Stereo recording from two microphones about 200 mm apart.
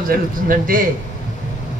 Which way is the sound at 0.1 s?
45° right (ahead or behind).